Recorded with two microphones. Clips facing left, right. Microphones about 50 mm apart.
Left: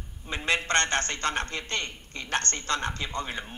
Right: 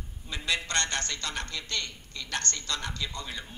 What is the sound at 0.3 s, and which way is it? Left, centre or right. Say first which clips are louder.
A man's voice: left 5 dB; left.